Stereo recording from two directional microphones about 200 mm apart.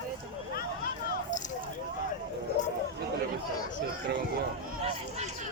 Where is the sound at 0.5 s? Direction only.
50° left (ahead or behind).